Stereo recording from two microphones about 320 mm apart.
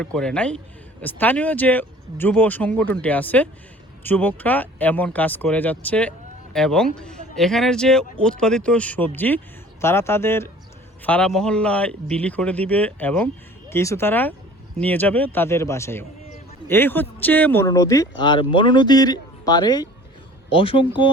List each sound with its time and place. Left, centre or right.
0.0 s speech: centre